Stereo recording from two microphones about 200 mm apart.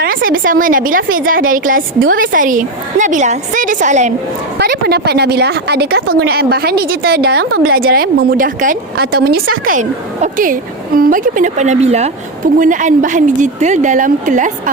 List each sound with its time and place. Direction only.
0.0 s a woman's voice: 45° right (ahead or behind)
4.5 s a woman's voice: 50° right (ahead or behind)